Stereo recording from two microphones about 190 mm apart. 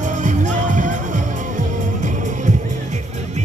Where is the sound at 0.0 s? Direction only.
40° right (ahead or behind).